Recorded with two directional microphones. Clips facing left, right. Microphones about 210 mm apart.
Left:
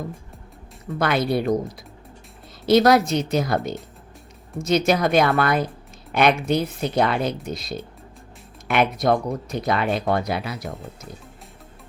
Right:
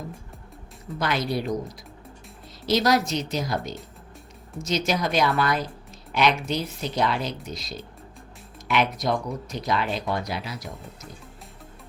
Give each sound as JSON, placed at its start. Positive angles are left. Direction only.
{"t": 0.9, "sound": "speech", "side_deg": 55}
{"t": 2.6, "sound": "speech", "side_deg": 55}